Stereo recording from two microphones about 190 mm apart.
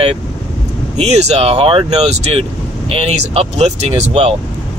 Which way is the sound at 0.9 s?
35° right (ahead or behind).